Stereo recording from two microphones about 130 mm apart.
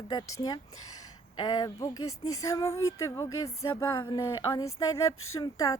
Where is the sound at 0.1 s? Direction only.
30° left (ahead or behind).